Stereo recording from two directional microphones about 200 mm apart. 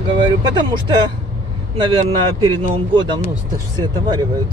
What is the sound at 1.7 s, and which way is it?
Speech, 25° right (ahead or behind).